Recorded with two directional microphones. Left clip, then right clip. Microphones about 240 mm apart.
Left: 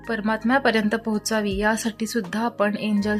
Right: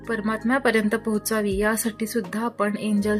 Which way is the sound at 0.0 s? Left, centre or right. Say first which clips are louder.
Left 1 dB; centre.